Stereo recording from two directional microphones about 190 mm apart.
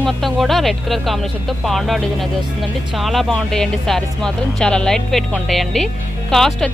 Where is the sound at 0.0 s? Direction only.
Centre (ahead or behind).